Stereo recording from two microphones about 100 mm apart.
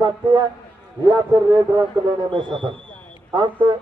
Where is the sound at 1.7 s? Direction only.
50° right (ahead or behind).